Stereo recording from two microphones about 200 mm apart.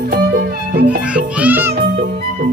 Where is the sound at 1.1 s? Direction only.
5° right (ahead or behind).